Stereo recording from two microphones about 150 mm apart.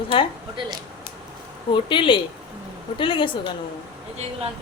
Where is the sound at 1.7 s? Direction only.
35° left (ahead or behind).